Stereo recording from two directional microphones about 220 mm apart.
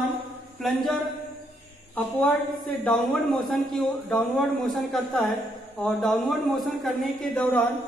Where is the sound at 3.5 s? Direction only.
Centre (ahead or behind).